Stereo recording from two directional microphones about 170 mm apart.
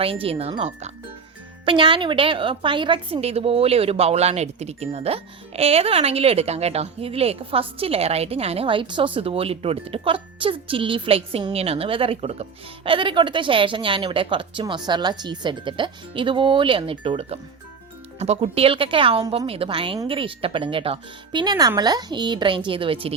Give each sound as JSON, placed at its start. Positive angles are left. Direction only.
{"t": 0.0, "sound": "a woman's voice", "side_deg": -35}